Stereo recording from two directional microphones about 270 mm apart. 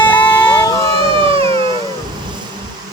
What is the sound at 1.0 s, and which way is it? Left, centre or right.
Cat, centre.